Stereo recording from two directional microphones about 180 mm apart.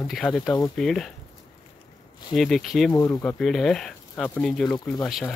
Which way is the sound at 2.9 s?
20° left (ahead or behind).